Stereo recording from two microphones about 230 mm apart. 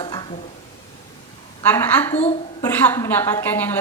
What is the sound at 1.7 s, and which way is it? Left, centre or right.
A woman's voice, centre.